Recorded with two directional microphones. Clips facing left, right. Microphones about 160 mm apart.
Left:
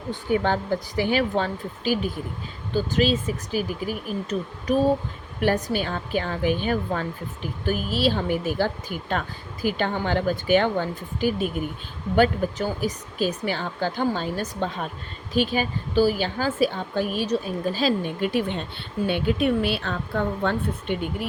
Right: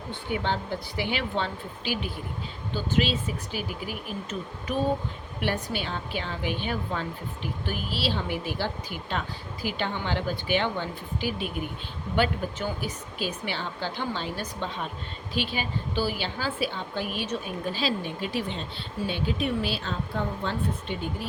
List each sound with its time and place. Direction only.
0.1 s speech: 45° left (ahead or behind); by 21.2 s 60° left (ahead or behind)